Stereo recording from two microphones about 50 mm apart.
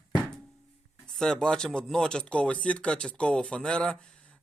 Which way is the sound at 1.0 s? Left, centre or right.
Centre.